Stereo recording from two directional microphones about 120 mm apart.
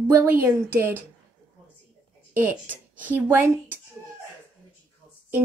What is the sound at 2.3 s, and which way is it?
Speech, 15° right (ahead or behind).